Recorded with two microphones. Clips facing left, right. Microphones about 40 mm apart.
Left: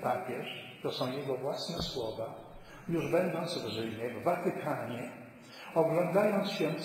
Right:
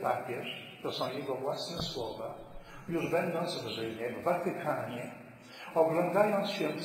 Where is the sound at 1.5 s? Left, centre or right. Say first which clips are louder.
Left 1 dB; right.